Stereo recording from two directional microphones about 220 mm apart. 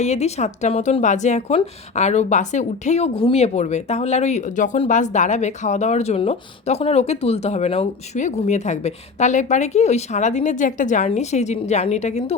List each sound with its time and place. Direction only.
0.0 s speech: 30° left (ahead or behind)